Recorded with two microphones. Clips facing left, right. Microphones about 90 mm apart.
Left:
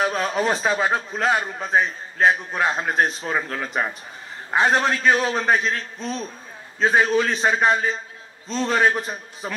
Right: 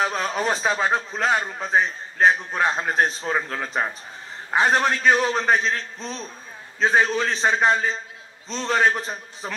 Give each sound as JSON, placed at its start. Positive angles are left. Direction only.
{"t": 0.0, "sound": "a man's voice", "side_deg": 10}
{"t": 5.6, "sound": "a man's voice", "side_deg": -30}
{"t": 5.9, "sound": "a man's voice", "side_deg": 5}